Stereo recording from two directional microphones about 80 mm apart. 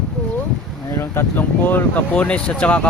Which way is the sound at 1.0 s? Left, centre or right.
Left.